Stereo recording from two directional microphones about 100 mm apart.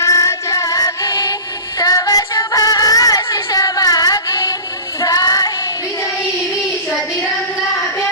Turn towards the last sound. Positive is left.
turn(degrees=0)  # may be behind; listen again after turning